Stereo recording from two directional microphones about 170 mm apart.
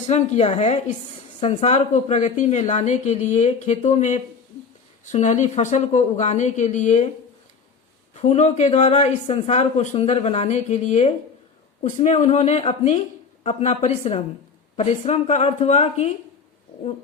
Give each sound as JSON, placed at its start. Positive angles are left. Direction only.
{"t": 0.1, "sound": "a woman's voice", "side_deg": 40}
{"t": 8.1, "sound": "speech", "side_deg": 40}